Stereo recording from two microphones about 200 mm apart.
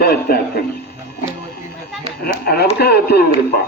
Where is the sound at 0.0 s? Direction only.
50° left (ahead or behind).